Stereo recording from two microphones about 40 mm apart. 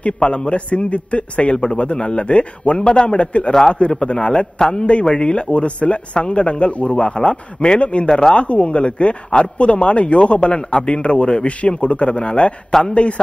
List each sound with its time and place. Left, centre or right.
0.0 s a man's voice: left
8.1 s a man's voice: centre